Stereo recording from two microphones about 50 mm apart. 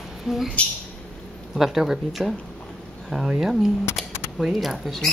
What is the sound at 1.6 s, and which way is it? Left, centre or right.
Speech, centre.